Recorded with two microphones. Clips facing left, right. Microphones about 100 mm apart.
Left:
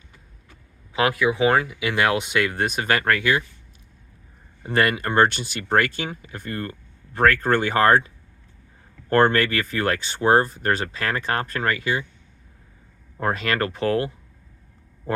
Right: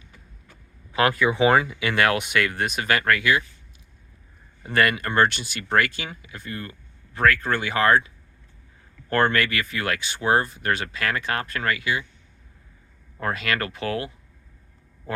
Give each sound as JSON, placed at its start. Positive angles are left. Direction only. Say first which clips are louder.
{"t": 0.9, "sound": "speech", "louder": "even", "side_deg": 10}
{"t": 1.6, "sound": "speech", "louder": "even", "side_deg": 15}
{"t": 4.6, "sound": "speech", "louder": "left 1 dB", "side_deg": 30}
{"t": 6.3, "sound": "speech", "louder": "left 4 dB", "side_deg": 45}
{"t": 9.0, "sound": "speech", "louder": "left 4 dB", "side_deg": 30}
{"t": 13.1, "sound": "speech", "louder": "left 3 dB", "side_deg": 35}
{"t": 15.1, "sound": "a sound", "louder": "left 5 dB", "side_deg": 30}